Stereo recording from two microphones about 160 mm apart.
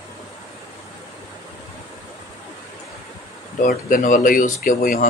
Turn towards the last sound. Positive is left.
turn(degrees=55)  # may be behind; listen again after turning